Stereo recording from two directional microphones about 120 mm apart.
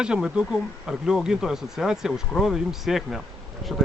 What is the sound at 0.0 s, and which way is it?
Speech, 5° right (ahead or behind).